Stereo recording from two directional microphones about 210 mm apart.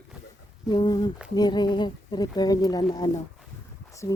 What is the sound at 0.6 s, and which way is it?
Speech, 20° left (ahead or behind).